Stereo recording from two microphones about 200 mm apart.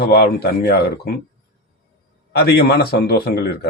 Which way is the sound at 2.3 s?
50° left (ahead or behind).